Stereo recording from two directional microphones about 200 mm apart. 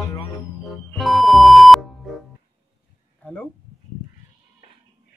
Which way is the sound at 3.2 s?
5° left (ahead or behind).